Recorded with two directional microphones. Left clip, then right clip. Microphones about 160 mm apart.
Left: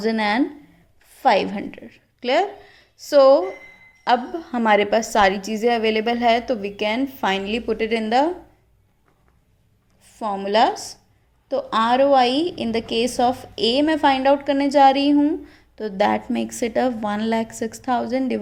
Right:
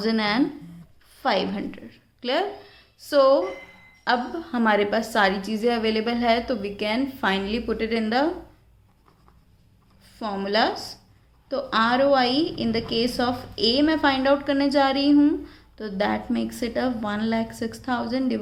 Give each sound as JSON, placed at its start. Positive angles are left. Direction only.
{"t": 0.0, "sound": "a woman's voice", "side_deg": 35}
{"t": 10.0, "sound": "a woman's voice", "side_deg": 35}